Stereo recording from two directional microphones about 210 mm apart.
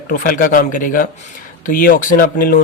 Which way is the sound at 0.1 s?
40° left (ahead or behind).